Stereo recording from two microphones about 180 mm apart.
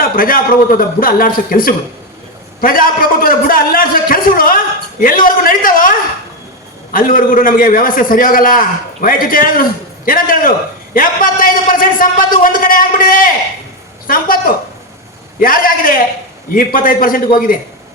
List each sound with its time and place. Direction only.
0.2 s a man's voice: 50° left (ahead or behind)
6.9 s a man's voice: 50° left (ahead or behind)
15.4 s a man's voice: 50° left (ahead or behind)